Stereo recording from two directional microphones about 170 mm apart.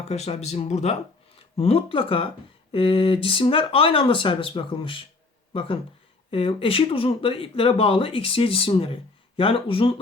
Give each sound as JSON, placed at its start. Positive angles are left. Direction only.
{"t": 0.1, "sound": "speech", "side_deg": 40}